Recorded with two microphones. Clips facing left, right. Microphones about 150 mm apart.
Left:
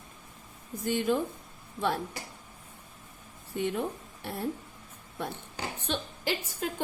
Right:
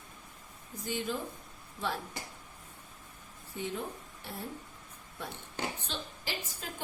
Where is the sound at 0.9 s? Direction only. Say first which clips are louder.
Left 8 dB; 60° left (ahead or behind).